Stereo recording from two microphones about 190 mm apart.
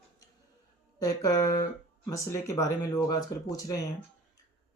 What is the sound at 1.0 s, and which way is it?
Speech, 20° left (ahead or behind).